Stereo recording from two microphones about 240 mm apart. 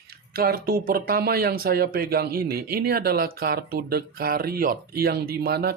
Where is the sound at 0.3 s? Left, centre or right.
Right.